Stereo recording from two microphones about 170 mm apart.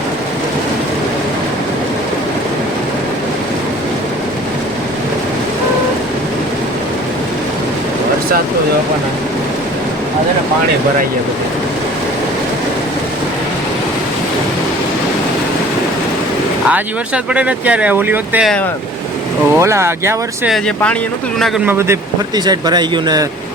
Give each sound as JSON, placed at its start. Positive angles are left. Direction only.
{"t": 17.3, "sound": "speech", "side_deg": -5}
{"t": 19.5, "sound": "speech", "side_deg": -15}
{"t": 20.5, "sound": "speech", "side_deg": 5}
{"t": 21.7, "sound": "speech", "side_deg": -15}